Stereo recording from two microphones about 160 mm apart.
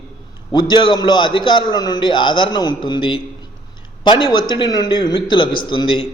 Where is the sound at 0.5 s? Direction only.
25° left (ahead or behind).